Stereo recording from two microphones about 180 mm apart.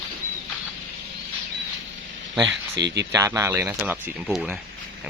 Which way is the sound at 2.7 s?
75° right (ahead or behind).